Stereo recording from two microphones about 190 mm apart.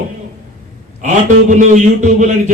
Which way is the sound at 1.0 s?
40° right (ahead or behind).